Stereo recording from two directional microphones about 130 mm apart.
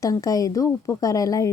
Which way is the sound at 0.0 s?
25° left (ahead or behind).